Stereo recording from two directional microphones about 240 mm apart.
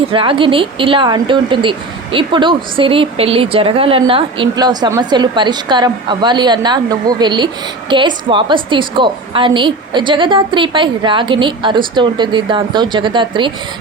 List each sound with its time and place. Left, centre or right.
0.1 s a woman's voice: right